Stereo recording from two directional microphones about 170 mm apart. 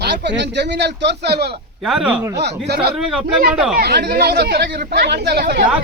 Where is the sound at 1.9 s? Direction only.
5° right (ahead or behind).